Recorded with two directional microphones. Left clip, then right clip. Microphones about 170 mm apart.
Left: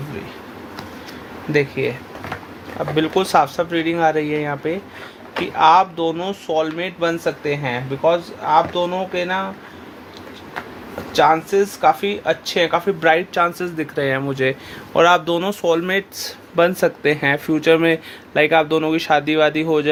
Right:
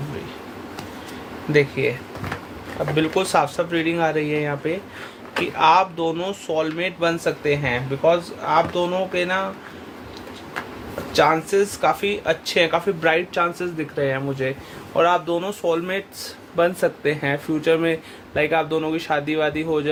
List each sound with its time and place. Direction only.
1.5 s speech: 25° left (ahead or behind)
2.9 s speech: 30° left (ahead or behind)
11.1 s speech: 20° left (ahead or behind); by 19.9 s 40° left (ahead or behind)